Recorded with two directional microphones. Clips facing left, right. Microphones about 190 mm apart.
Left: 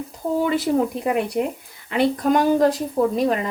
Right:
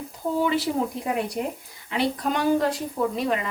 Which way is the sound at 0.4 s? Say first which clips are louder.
Left 5 dB; 50° left (ahead or behind).